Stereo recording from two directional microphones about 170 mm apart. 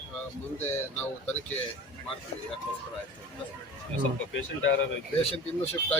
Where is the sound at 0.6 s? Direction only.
10° left (ahead or behind).